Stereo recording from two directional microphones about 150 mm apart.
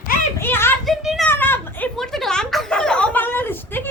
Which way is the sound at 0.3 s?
15° left (ahead or behind).